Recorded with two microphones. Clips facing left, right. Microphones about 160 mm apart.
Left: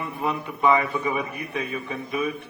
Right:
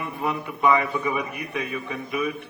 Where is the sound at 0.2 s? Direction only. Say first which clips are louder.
Even; 20° left (ahead or behind).